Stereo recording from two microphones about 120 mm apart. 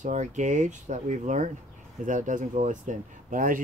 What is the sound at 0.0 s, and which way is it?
Speech, 85° right.